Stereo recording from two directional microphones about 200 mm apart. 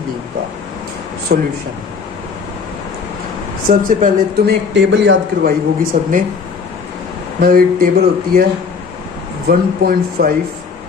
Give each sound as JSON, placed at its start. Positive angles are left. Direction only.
{"t": 1.3, "sound": "speech", "side_deg": -50}
{"t": 3.7, "sound": "speech", "side_deg": -45}
{"t": 4.7, "sound": "a man's voice", "side_deg": -65}
{"t": 5.5, "sound": "speech", "side_deg": -45}
{"t": 7.4, "sound": "speech", "side_deg": -45}